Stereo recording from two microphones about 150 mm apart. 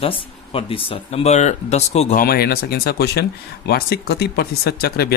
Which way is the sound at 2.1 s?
90° left.